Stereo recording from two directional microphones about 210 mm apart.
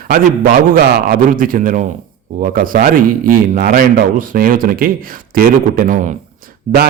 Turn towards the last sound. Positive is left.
turn(degrees=-30)  # may be behind; listen again after turning